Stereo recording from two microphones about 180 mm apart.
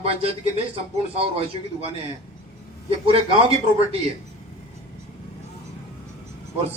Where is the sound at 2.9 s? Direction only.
30° right (ahead or behind).